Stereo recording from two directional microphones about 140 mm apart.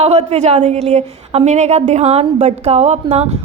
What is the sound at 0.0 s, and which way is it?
A woman's voice, 50° right (ahead or behind).